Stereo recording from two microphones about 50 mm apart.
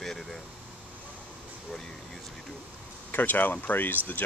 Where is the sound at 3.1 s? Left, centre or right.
Left.